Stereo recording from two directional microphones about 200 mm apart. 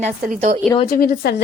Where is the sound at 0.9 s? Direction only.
50° left (ahead or behind).